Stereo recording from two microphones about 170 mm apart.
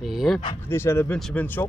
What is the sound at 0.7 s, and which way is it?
Speech, 15° left (ahead or behind).